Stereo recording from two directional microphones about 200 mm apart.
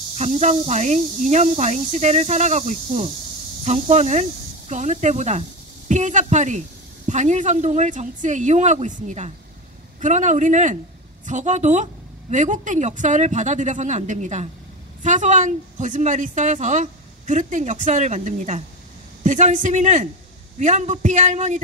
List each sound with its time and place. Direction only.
0.1 s speech: 35° right (ahead or behind)